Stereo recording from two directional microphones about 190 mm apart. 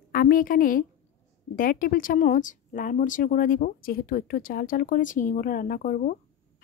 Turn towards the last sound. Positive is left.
turn(degrees=45)  # may be behind; listen again after turning